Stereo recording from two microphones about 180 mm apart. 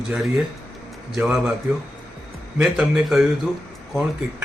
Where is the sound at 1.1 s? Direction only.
Centre (ahead or behind).